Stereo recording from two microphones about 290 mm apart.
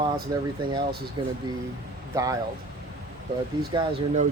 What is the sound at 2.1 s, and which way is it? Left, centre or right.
Speech, centre.